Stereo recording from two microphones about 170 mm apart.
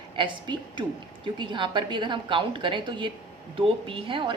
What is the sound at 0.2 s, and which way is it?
A woman's voice, 30° right (ahead or behind).